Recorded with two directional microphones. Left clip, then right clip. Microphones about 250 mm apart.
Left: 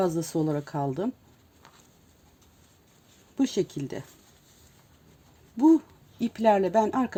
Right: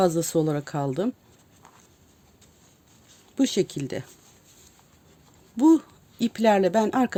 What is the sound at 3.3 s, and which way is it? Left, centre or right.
Speech, right.